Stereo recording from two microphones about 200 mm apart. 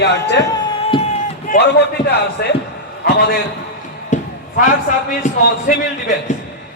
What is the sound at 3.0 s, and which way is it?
Speech, 50° left (ahead or behind).